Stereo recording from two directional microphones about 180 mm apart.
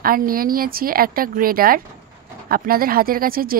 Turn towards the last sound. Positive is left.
turn(degrees=-55)  # may be behind; listen again after turning